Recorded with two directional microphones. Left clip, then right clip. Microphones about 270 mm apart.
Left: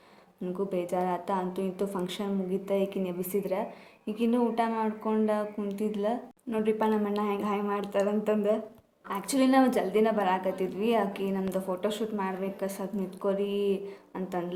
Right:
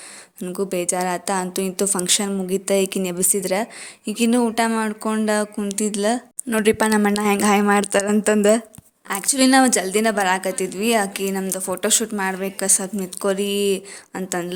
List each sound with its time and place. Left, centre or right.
0.4 s a woman's voice: right